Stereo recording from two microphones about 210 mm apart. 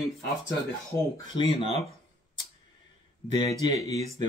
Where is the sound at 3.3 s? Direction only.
20° left (ahead or behind).